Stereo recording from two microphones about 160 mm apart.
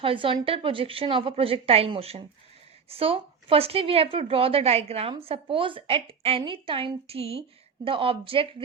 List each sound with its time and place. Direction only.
0.0 s a woman's voice: 35° right (ahead or behind)